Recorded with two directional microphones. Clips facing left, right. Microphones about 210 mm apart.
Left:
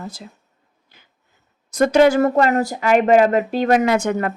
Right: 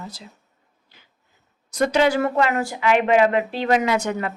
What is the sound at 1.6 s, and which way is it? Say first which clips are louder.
Speech: left 5 dB; 50° left (ahead or behind).